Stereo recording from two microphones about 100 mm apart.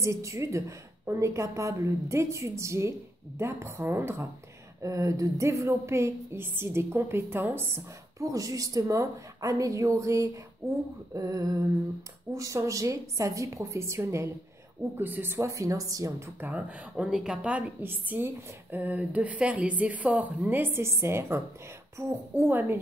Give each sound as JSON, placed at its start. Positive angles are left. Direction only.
{"t": 0.0, "sound": "a woman's voice", "side_deg": -30}
{"t": 16.3, "sound": "a woman's voice", "side_deg": -15}